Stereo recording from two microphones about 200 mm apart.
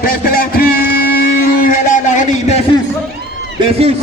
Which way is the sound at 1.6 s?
40° left (ahead or behind).